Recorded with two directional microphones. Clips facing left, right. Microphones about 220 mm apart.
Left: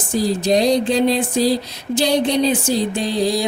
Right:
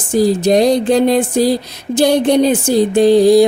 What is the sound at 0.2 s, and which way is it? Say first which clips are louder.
Music: right 6 dB; 55° right (ahead or behind).